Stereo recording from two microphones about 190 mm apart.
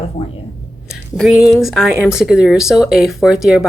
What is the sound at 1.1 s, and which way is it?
Speech, centre (ahead or behind).